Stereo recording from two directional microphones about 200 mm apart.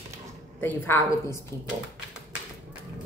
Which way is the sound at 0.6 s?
10° left (ahead or behind).